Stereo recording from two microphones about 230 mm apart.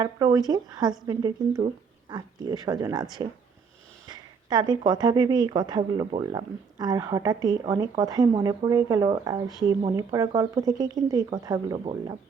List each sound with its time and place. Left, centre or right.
0.0 s speech: centre